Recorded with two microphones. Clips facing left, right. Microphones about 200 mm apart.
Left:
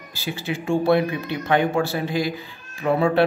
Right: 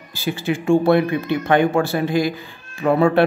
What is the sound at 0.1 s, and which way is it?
A man's voice, 50° right (ahead or behind).